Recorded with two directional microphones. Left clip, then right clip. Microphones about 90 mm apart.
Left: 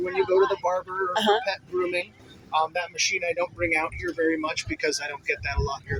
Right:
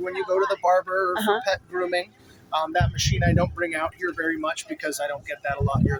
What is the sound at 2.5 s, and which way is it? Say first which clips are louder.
Speech: right 1 dB; 55° right (ahead or behind).